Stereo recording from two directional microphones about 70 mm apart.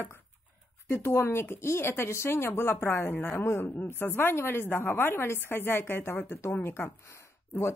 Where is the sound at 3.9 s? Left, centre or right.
Left.